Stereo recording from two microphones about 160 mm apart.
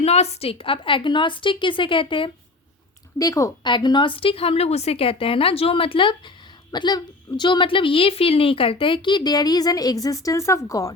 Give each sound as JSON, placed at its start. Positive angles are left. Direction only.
{"t": 0.0, "sound": "a woman's voice", "side_deg": 40}
{"t": 3.2, "sound": "a woman's voice", "side_deg": 20}